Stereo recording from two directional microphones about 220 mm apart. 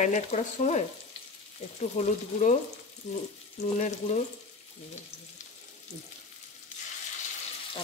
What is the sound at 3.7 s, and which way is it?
Speech, 35° left (ahead or behind).